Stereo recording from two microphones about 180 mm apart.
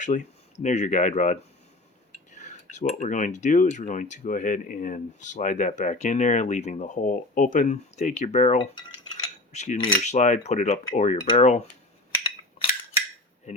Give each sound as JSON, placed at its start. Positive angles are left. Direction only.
{"t": 0.0, "sound": "speech", "side_deg": 45}
{"t": 8.5, "sound": "cutlery", "side_deg": 25}
{"t": 9.5, "sound": "speech", "side_deg": 40}